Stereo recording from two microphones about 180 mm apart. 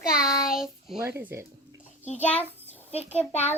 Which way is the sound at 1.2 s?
15° right (ahead or behind).